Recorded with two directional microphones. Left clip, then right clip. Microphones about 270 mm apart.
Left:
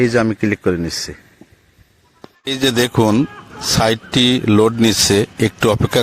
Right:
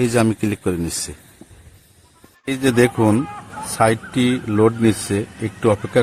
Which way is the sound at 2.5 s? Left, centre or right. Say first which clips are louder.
Even; left.